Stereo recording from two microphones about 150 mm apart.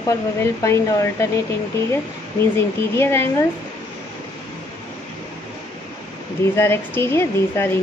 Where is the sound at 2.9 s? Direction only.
15° left (ahead or behind).